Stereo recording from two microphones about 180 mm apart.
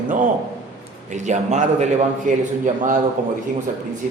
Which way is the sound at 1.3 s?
40° right (ahead or behind).